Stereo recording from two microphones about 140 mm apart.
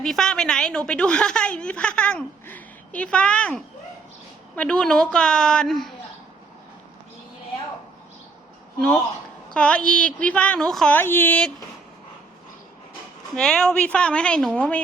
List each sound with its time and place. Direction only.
0.0 s a woman's voice: 5° left (ahead or behind)
9.5 s a woman's voice: 5° left (ahead or behind)
10.9 s a woman's voice: 15° left (ahead or behind)
13.3 s a woman's voice: 5° left (ahead or behind)